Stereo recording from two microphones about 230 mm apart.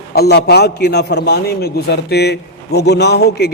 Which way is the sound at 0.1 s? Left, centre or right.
Left.